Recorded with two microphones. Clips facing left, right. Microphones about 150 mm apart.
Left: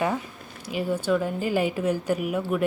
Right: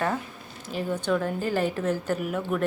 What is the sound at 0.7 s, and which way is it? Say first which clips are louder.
A woman's voice: left 2 dB; 10° left (ahead or behind).